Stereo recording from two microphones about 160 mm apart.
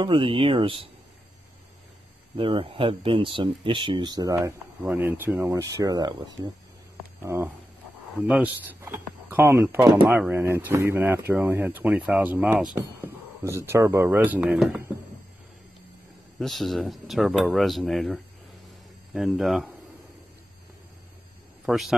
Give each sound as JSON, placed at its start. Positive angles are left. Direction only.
{"t": 0.0, "sound": "speech", "side_deg": -30}
{"t": 2.3, "sound": "speech", "side_deg": -30}
{"t": 7.2, "sound": "speech", "side_deg": -15}
{"t": 13.0, "sound": "speech", "side_deg": -20}
{"t": 16.3, "sound": "speech", "side_deg": 0}
{"t": 21.6, "sound": "speech", "side_deg": 0}